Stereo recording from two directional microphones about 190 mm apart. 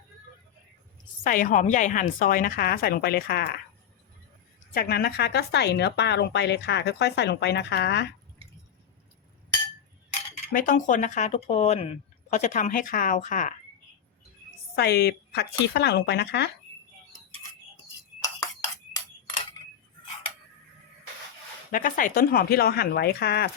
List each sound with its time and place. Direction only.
1.2 s a woman's voice: 45° left (ahead or behind)
4.7 s a woman's voice: 55° left (ahead or behind)
10.5 s speech: 45° left (ahead or behind)
14.8 s a woman's voice: 60° left (ahead or behind)
21.7 s a woman's voice: 45° left (ahead or behind)